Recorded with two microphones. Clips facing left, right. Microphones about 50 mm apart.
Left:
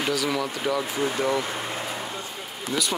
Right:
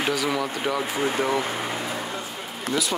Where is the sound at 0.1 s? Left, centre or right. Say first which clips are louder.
Right 1 dB; centre.